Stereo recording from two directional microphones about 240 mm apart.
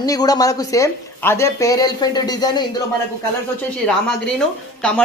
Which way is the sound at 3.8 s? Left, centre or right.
Centre.